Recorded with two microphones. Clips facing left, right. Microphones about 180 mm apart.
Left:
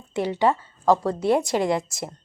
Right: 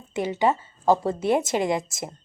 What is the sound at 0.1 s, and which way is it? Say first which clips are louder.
A woman's voice: left 1 dB; 5° right (ahead or behind).